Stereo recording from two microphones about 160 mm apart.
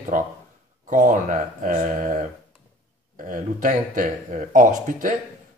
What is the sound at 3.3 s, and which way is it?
Speech, 55° right (ahead or behind).